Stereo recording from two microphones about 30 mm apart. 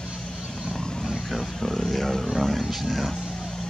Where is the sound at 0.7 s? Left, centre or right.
Left.